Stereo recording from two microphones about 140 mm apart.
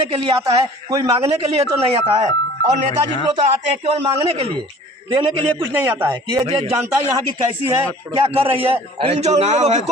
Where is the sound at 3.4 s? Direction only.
50° right (ahead or behind).